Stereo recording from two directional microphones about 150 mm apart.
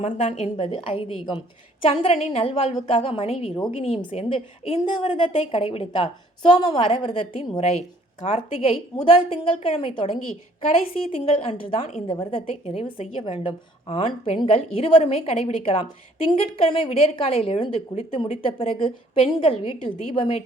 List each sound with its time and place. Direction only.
0.0 s a woman's voice: 45° left (ahead or behind); by 7.6 s 30° left (ahead or behind)
8.2 s a woman's voice: 45° left (ahead or behind)
11.2 s a woman's voice: 40° left (ahead or behind)